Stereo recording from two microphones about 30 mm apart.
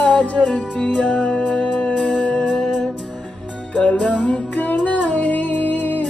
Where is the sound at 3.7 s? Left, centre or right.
Left.